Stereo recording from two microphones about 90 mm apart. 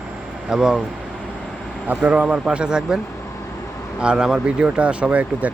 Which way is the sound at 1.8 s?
15° right (ahead or behind).